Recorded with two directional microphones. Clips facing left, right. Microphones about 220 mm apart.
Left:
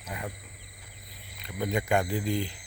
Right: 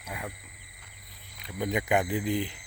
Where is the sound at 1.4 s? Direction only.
15° right (ahead or behind).